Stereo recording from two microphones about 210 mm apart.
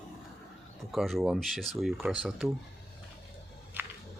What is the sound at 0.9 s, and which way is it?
Speech, centre (ahead or behind).